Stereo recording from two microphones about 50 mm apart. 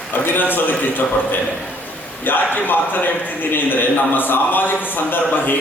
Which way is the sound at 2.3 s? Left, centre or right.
Left.